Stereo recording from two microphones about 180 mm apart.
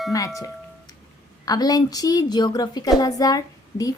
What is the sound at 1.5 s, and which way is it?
A woman's voice, 20° left (ahead or behind).